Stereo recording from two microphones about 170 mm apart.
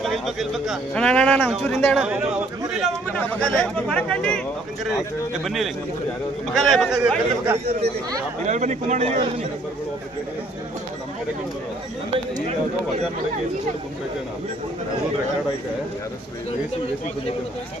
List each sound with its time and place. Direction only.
0.0 s speech: centre (ahead or behind)
3.1 s speech: 10° left (ahead or behind)
5.5 s speech: centre (ahead or behind)
8.4 s speech: 45° right (ahead or behind)